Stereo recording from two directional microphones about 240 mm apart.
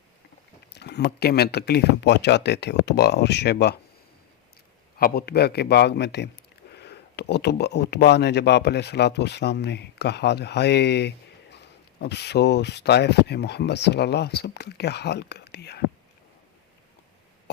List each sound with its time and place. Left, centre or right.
0.7 s speech: left
4.9 s speech: left